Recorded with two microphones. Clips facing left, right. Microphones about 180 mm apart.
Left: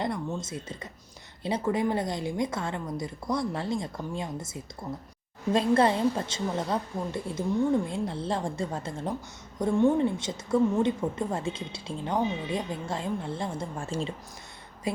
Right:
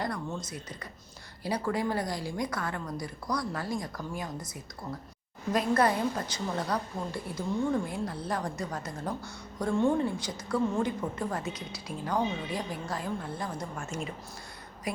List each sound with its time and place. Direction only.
0.0 s a woman's voice: 25° left (ahead or behind)